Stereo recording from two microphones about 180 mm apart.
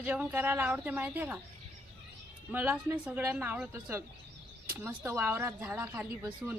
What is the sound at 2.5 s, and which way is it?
Speech, 10° right (ahead or behind).